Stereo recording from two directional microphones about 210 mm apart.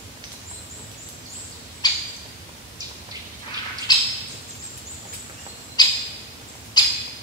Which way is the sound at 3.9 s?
20° left (ahead or behind).